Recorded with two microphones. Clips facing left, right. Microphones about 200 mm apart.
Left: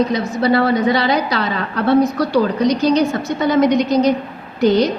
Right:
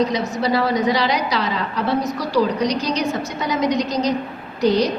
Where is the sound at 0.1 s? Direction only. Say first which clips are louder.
Left 4 dB; 60° left (ahead or behind).